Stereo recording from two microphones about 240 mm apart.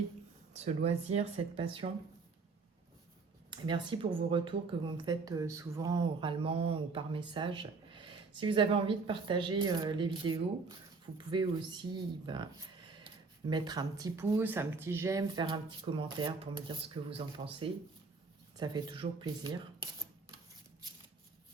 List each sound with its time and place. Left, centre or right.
0.5 s speech: right
3.5 s speech: centre